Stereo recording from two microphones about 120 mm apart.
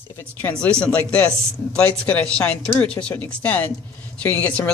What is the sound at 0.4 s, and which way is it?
A woman's voice, 10° left (ahead or behind).